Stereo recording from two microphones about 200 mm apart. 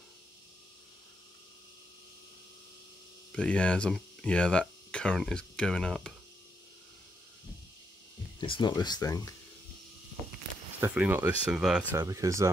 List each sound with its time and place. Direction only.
3.3 s speech: 5° left (ahead or behind)
8.4 s speech: 25° left (ahead or behind)
10.8 s speech: 10° right (ahead or behind)